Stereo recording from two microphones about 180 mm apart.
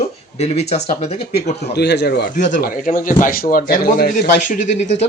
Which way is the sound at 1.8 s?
65° left (ahead or behind).